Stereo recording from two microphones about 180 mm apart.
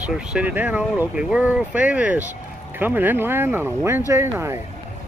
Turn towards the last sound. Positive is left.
turn(degrees=-15)  # may be behind; listen again after turning